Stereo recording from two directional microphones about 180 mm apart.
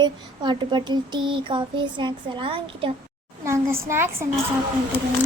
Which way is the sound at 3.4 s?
15° right (ahead or behind).